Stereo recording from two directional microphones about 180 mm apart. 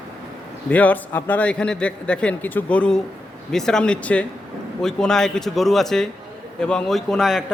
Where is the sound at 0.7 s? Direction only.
10° left (ahead or behind).